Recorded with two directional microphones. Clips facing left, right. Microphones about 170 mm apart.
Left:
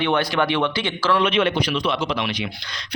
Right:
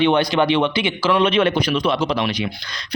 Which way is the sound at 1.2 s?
40° right (ahead or behind).